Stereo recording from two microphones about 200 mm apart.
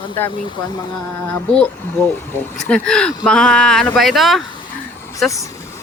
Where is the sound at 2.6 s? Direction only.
5° left (ahead or behind).